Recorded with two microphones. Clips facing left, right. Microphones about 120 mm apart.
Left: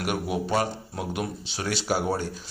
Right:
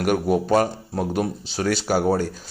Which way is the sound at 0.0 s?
45° right (ahead or behind).